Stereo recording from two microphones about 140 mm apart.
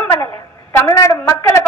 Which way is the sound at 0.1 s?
20° left (ahead or behind).